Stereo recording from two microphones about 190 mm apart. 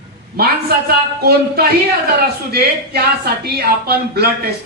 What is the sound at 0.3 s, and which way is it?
Speech, 55° right (ahead or behind).